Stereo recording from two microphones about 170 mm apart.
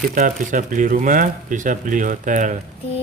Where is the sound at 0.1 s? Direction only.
55° right (ahead or behind).